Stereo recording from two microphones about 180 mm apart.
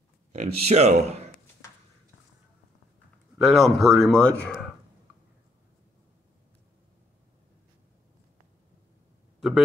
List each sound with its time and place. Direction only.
0.3 s speech: 35° right (ahead or behind)
3.3 s a man's voice: centre (ahead or behind)